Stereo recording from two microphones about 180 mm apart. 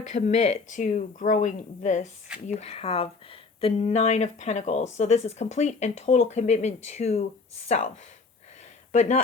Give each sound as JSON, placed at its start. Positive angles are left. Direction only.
{"t": 0.1, "sound": "speech", "side_deg": 40}
{"t": 8.9, "sound": "speech", "side_deg": 40}